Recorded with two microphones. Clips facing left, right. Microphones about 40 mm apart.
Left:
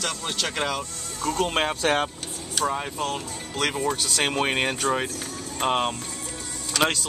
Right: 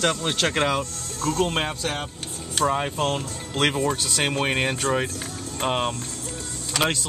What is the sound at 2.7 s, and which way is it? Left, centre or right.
Speech, right.